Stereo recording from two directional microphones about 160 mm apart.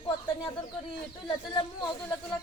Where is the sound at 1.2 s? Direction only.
25° left (ahead or behind).